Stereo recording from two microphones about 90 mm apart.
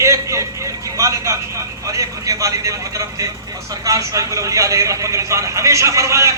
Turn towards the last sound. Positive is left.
turn(degrees=-35)  # may be behind; listen again after turning